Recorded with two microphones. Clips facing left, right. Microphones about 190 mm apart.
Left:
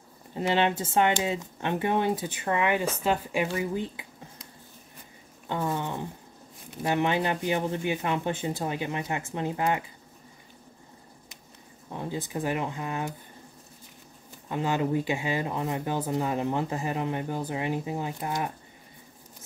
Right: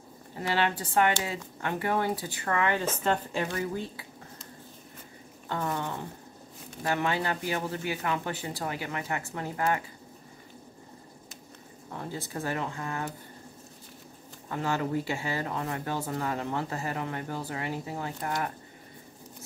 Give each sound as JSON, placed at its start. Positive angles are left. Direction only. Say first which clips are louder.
{"t": 0.4, "sound": "speech", "louder": "left 4 dB", "side_deg": 20}
{"t": 3.5, "sound": "a sound", "louder": "left 3 dB", "side_deg": 15}
{"t": 5.5, "sound": "speech", "louder": "left 2 dB", "side_deg": 15}
{"t": 11.9, "sound": "speech", "louder": "left 4 dB", "side_deg": 15}
{"t": 14.5, "sound": "speech", "louder": "left 3 dB", "side_deg": 15}